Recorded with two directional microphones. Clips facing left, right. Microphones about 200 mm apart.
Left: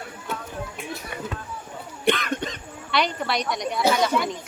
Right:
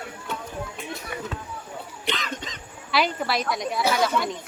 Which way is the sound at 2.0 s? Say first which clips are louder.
Left 8 dB; 55° left (ahead or behind).